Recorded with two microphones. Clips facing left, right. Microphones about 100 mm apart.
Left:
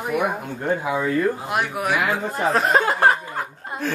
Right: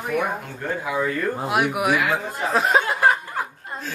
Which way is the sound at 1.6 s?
10° right (ahead or behind).